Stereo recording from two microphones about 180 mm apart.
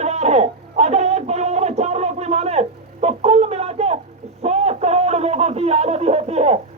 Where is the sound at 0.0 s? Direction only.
35° right (ahead or behind).